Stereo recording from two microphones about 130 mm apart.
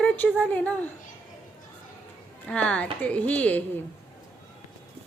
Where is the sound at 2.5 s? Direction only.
10° left (ahead or behind).